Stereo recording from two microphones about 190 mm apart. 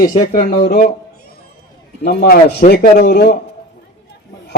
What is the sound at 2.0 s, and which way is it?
A man's voice, 55° left (ahead or behind).